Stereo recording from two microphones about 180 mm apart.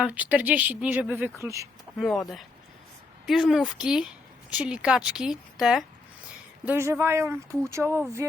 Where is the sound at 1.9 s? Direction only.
Centre (ahead or behind).